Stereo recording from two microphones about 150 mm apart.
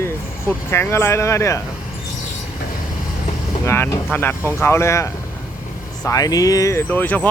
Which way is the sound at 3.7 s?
15° left (ahead or behind).